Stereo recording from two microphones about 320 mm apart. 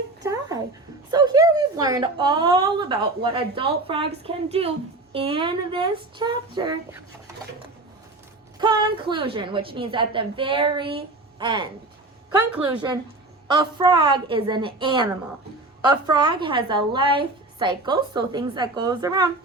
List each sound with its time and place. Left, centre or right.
0.2 s a sound: centre
1.1 s a woman's voice: centre
8.5 s a woman's voice: centre